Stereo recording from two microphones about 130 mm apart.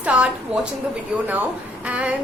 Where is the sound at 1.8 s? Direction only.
10° right (ahead or behind).